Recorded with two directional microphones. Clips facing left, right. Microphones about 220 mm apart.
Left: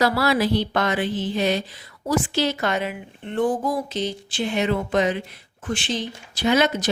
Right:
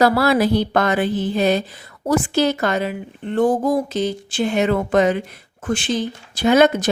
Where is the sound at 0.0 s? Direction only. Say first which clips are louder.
Right 5 dB; 50° right (ahead or behind).